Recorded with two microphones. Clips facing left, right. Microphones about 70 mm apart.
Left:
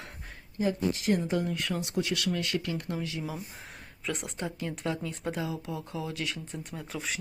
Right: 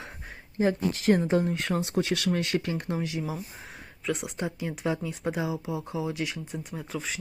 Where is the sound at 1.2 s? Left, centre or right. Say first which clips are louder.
Right 4 dB; right.